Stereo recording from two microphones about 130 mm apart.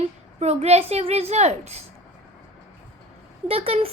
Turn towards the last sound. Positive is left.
turn(degrees=-50)  # may be behind; listen again after turning